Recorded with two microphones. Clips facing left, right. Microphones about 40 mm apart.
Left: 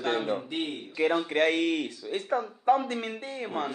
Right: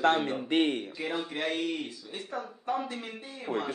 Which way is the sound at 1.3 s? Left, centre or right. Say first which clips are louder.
Left 7 dB; left.